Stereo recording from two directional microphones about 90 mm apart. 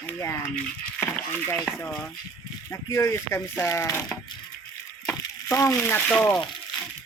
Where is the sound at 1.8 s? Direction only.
15° left (ahead or behind).